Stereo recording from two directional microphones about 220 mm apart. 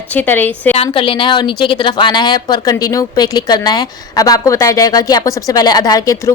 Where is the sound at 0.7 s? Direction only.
25° left (ahead or behind).